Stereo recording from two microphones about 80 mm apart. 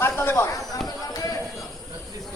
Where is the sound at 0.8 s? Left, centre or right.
Left.